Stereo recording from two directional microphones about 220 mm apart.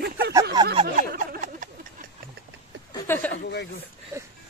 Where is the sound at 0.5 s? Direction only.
20° right (ahead or behind).